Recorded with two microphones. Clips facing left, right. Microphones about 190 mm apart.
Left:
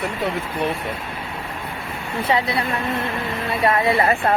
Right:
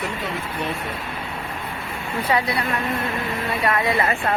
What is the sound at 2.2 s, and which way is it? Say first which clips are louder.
Speech: left 1 dB; 25° left (ahead or behind).